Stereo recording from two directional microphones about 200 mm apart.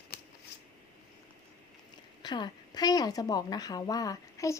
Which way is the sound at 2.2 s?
20° left (ahead or behind).